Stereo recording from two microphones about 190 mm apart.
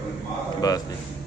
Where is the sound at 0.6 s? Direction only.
20° left (ahead or behind).